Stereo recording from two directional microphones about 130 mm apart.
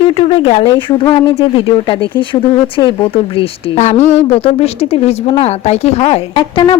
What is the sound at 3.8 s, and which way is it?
Speech, 60° left (ahead or behind).